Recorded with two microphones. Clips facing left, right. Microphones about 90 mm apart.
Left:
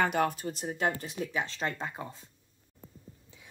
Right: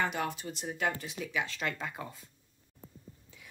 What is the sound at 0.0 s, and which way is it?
Speech, 50° left (ahead or behind).